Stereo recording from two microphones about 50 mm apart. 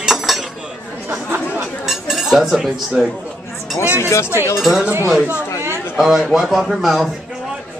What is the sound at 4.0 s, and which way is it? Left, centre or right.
Speech, left.